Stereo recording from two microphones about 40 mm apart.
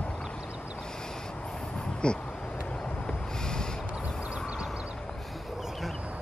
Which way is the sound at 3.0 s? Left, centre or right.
Centre.